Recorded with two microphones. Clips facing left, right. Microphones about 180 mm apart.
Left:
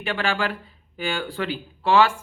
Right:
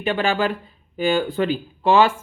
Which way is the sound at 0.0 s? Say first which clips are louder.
Right 5 dB; 20° right (ahead or behind).